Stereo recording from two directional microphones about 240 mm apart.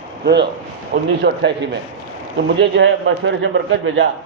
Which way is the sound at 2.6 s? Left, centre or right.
Right.